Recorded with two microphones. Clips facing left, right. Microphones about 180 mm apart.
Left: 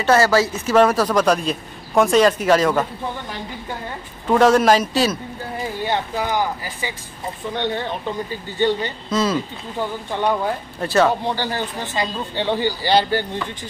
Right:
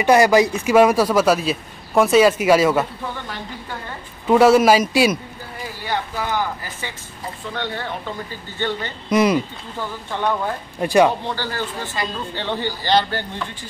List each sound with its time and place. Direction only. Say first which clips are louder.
0.0 s speech: right 2 dB; 15° right (ahead or behind)
4.3 s speech: right 2 dB; 10° right (ahead or behind)
5.9 s speech: even; 15° left (ahead or behind)
9.1 s speech: right 4 dB; 15° right (ahead or behind)
10.8 s speech: right 2 dB; 15° right (ahead or behind)
11.2 s speech: left 2 dB; 15° left (ahead or behind)